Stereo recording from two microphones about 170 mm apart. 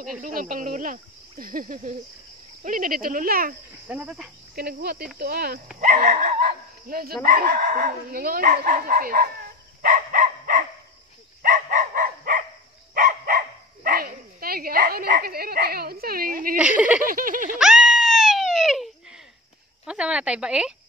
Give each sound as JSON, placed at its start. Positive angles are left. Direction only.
{"t": 0.2, "sound": "speech", "side_deg": -55}
{"t": 3.8, "sound": "speech", "side_deg": -10}
{"t": 4.6, "sound": "speech", "side_deg": -65}
{"t": 5.8, "sound": "dog", "side_deg": -45}
{"t": 7.2, "sound": "speech", "side_deg": -50}
{"t": 9.8, "sound": "a sound", "side_deg": -55}
{"t": 11.4, "sound": "dog", "side_deg": -50}
{"t": 16.5, "sound": "speech", "side_deg": -5}
{"t": 17.0, "sound": "speech", "side_deg": -55}
{"t": 17.6, "sound": "screaming", "side_deg": -5}
{"t": 19.9, "sound": "speech", "side_deg": -5}